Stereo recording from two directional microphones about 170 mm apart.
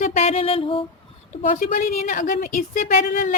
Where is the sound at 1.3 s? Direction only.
50° left (ahead or behind).